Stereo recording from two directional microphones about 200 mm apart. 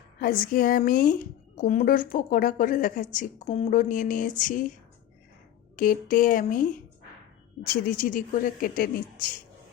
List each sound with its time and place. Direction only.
0.2 s a woman's voice: 45° left (ahead or behind)
5.7 s speech: 45° left (ahead or behind)